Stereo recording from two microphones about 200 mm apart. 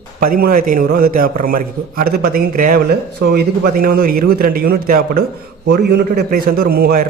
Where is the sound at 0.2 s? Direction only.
45° right (ahead or behind).